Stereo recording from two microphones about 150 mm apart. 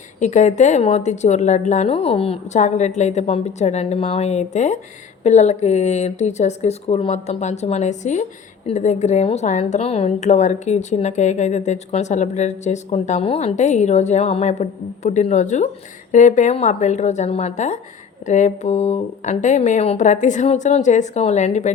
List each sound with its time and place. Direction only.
0.2 s a woman's voice: 55° left (ahead or behind)